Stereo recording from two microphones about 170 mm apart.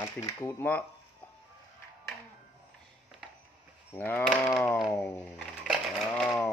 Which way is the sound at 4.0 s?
10° left (ahead or behind).